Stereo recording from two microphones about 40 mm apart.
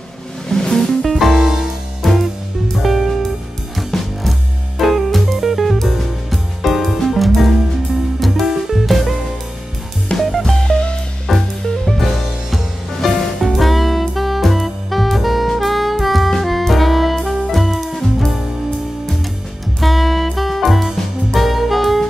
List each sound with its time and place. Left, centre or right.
0.5 s music: centre
1.4 s music: centre
2.0 s music: centre
10.1 s music: left
10.4 s music: centre
10.7 s music: left
11.2 s music: centre
12.0 s music: centre
19.8 s music: centre